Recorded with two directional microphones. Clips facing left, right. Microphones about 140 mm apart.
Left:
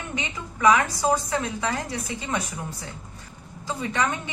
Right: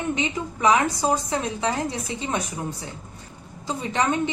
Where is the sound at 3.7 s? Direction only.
20° right (ahead or behind).